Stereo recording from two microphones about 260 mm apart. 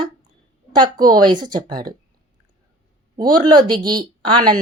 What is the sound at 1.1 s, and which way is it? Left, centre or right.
Speech, centre.